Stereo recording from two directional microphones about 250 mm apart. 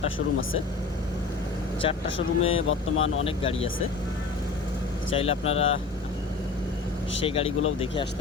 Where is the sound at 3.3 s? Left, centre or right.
Left.